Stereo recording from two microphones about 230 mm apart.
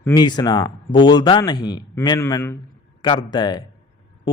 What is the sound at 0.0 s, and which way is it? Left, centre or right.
Speech, centre.